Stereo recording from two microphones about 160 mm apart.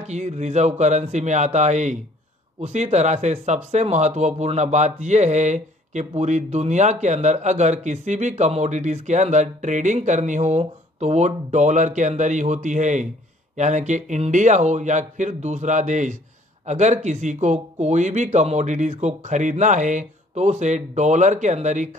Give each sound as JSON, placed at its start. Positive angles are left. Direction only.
{"t": 0.0, "sound": "speech", "side_deg": -45}